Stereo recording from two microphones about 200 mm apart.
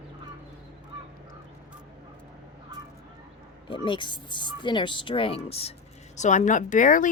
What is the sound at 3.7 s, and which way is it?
Speech, 25° left (ahead or behind).